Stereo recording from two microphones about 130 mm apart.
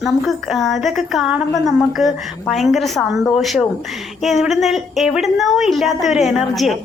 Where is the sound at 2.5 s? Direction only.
Centre (ahead or behind).